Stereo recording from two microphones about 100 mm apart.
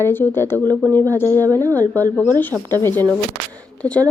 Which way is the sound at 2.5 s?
10° right (ahead or behind).